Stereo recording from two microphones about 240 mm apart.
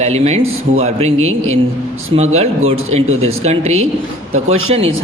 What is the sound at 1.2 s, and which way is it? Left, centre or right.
Speech, right.